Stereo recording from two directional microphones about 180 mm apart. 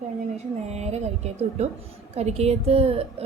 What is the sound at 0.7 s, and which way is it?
A woman's voice, 35° right (ahead or behind).